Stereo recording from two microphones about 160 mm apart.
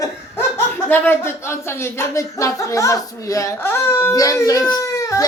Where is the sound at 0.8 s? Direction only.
15° left (ahead or behind).